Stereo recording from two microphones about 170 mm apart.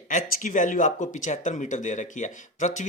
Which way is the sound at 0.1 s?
50° left (ahead or behind).